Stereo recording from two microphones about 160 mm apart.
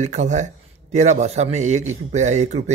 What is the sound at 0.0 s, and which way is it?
A man's voice, 50° right (ahead or behind).